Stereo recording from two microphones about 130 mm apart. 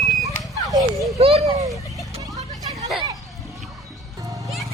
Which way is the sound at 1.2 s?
50° right (ahead or behind).